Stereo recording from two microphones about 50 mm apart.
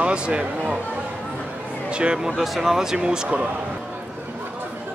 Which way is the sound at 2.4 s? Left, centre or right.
Centre.